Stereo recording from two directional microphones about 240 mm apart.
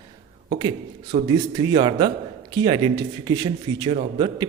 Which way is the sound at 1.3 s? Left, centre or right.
Centre.